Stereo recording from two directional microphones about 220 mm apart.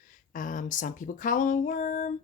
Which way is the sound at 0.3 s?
35° left (ahead or behind).